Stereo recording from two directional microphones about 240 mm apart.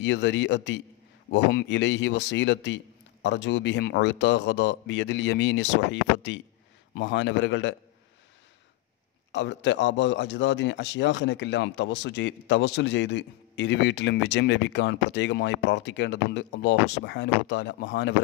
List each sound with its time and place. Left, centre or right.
0.0 s a man's voice: left
9.3 s a man's voice: left